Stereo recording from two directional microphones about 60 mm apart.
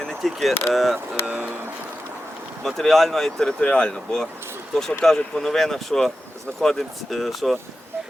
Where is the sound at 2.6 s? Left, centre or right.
Centre.